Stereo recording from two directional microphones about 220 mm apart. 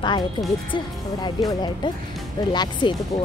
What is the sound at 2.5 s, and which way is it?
Speech, 20° left (ahead or behind).